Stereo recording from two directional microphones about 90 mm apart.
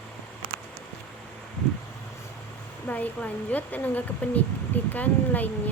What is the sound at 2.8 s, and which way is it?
A woman's voice, 15° left (ahead or behind).